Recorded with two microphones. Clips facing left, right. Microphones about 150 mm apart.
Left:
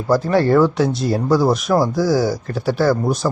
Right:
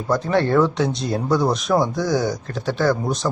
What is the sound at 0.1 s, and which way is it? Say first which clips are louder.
Speech: left 4 dB; 5° left (ahead or behind).